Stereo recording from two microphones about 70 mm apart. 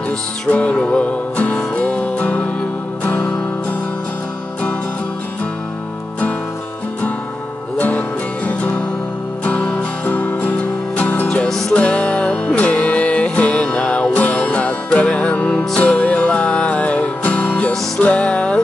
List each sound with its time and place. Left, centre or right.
0.5 s music: centre
7.7 s music: left